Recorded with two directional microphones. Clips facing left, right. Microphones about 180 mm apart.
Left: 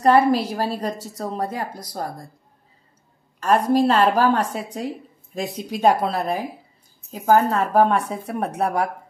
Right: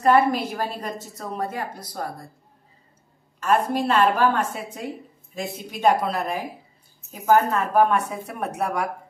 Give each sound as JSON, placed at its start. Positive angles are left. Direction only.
{"t": 0.0, "sound": "a woman's voice", "side_deg": 35}
{"t": 3.4, "sound": "a woman's voice", "side_deg": 40}